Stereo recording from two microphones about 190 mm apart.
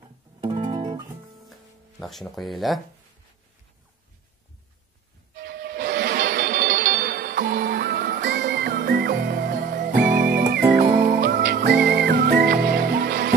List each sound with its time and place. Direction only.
0.4 s guitar: 25° right (ahead or behind)
1.5 s music: centre (ahead or behind)
5.3 s music: 55° right (ahead or behind)